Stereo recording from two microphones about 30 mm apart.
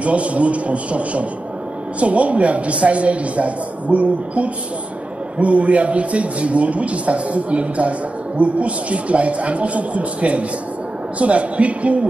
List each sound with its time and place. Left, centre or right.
0.0 s a man's voice: right